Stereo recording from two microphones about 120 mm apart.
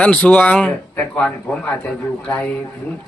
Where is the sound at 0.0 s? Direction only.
10° left (ahead or behind).